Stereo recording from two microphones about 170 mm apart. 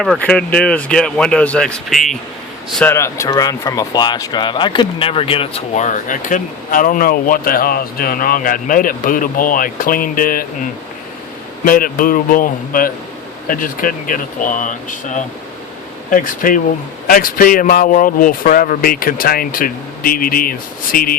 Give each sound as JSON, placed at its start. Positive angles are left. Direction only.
{"t": 0.2, "sound": "speech", "side_deg": 5}
{"t": 2.7, "sound": "speech", "side_deg": 10}
{"t": 11.6, "sound": "speech", "side_deg": 55}